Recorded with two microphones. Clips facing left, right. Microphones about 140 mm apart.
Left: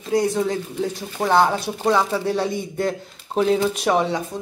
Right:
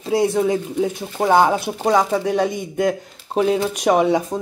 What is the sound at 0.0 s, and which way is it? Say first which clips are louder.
Speech: right 3 dB; 25° right (ahead or behind).